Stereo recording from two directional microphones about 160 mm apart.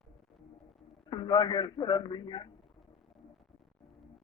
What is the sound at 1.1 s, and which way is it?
A man's voice, 30° left (ahead or behind).